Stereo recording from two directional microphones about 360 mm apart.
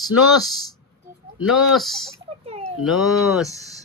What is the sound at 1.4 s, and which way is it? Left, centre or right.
Speech, centre.